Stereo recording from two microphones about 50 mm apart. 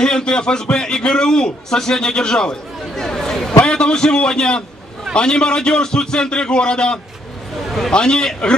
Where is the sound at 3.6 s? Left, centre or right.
Centre.